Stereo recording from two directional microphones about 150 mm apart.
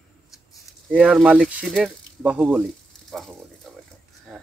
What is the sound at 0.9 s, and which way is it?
Speech, 5° right (ahead or behind).